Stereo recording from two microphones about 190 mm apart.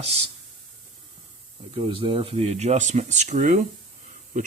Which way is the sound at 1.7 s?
30° right (ahead or behind).